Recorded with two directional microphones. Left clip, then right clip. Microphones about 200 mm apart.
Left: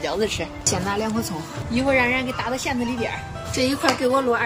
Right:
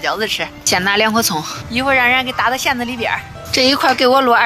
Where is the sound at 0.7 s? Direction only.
40° right (ahead or behind).